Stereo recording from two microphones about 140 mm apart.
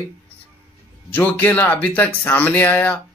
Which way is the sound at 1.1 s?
15° left (ahead or behind).